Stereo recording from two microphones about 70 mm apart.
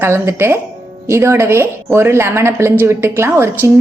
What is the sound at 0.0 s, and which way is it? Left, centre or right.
A woman's voice, right.